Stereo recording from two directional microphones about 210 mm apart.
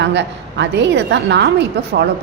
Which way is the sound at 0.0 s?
55° right (ahead or behind).